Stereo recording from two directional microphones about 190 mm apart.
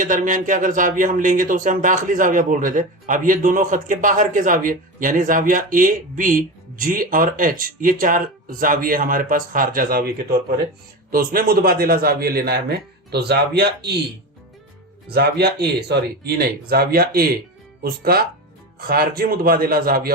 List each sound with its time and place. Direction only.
0.0 s speech: 40° right (ahead or behind)
11.1 s speech: 45° right (ahead or behind)
15.1 s speech: 60° right (ahead or behind)